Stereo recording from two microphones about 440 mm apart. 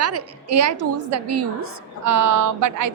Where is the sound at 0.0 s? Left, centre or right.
Right.